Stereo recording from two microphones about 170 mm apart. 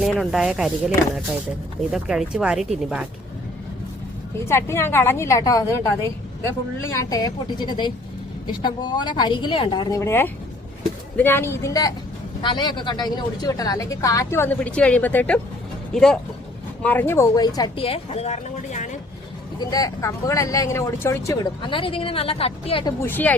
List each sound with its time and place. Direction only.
0.0 s speech: centre (ahead or behind)
1.9 s speech: 5° right (ahead or behind)
4.4 s a woman's voice: 15° left (ahead or behind)
6.9 s speech: 20° left (ahead or behind)
10.0 s a woman's voice: 15° left (ahead or behind); by 18.9 s 45° left (ahead or behind)
19.5 s speech: 20° left (ahead or behind)
21.6 s a woman's voice: 30° left (ahead or behind)
23.0 s a woman's voice: 10° left (ahead or behind)